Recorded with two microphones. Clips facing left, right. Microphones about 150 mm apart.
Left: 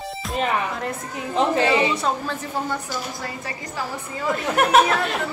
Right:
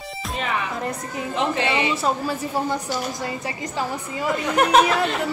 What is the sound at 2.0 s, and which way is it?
A woman's voice, 5° right (ahead or behind).